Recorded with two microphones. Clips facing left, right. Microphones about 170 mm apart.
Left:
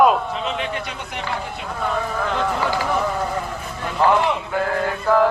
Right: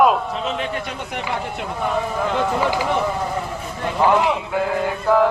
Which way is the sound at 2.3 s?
15° right (ahead or behind).